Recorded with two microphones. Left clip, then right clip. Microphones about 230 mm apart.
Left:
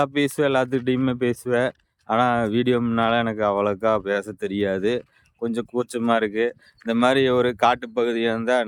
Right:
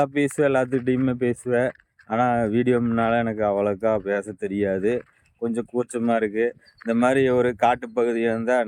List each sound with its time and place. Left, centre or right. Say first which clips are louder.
0.0 s speech: even; centre